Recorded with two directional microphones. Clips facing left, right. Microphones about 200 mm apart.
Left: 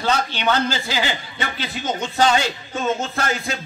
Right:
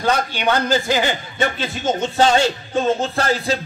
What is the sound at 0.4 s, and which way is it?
Speech, 50° right (ahead or behind).